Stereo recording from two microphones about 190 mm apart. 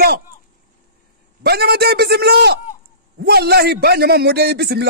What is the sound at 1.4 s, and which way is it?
A man's voice, 55° right (ahead or behind).